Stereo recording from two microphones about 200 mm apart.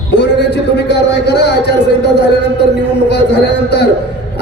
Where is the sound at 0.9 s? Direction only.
60° left (ahead or behind).